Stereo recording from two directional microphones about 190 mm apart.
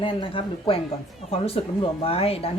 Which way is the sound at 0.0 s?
25° left (ahead or behind).